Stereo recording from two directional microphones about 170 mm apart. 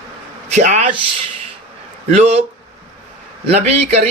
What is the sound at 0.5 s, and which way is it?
Speech, 45° right (ahead or behind).